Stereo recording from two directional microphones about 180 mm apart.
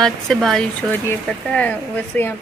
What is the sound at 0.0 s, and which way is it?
Speech, centre (ahead or behind).